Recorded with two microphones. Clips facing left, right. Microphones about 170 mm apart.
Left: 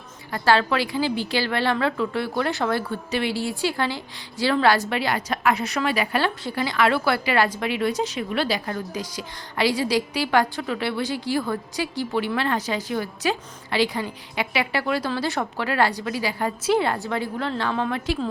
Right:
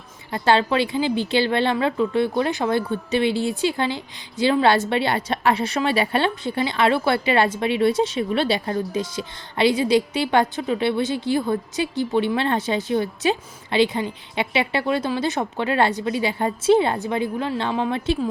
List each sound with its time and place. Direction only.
0.3 s a woman's voice: 20° right (ahead or behind)